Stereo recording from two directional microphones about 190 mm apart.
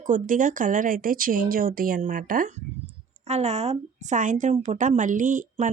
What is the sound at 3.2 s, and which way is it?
A woman's voice, 35° right (ahead or behind).